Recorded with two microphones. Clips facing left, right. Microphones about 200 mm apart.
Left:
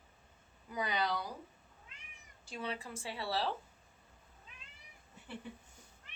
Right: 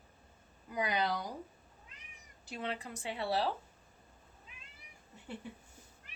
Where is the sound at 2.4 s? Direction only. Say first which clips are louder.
Right 1 dB; 20° right (ahead or behind).